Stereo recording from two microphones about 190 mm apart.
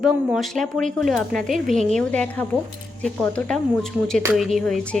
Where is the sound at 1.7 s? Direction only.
40° right (ahead or behind).